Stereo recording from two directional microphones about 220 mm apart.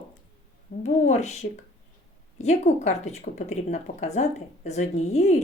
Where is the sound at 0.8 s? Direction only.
30° left (ahead or behind).